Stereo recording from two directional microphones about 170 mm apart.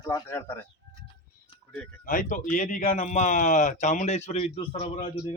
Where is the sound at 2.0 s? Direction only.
50° left (ahead or behind); by 5.2 s 35° left (ahead or behind).